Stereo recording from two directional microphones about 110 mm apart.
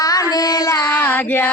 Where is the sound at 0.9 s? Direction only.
15° left (ahead or behind).